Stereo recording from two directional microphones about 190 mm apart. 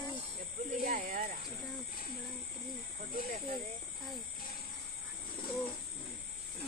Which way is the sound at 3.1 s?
50° right (ahead or behind).